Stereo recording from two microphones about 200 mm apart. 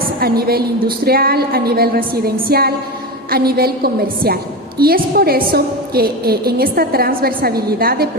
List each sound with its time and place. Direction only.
0.2 s a woman's voice: 50° right (ahead or behind)